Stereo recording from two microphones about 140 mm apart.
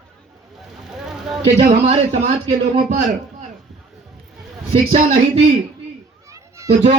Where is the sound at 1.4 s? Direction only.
50° right (ahead or behind).